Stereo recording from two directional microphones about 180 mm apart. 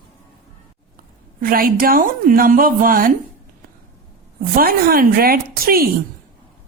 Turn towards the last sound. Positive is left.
turn(degrees=-55)  # may be behind; listen again after turning